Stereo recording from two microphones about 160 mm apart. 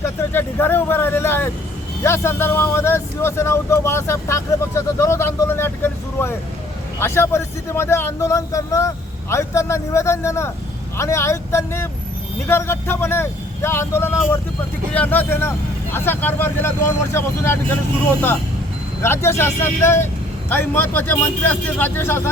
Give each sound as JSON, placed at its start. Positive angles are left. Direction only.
{"t": 0.3, "sound": "speech", "side_deg": 15}
{"t": 19.0, "sound": "speech", "side_deg": 15}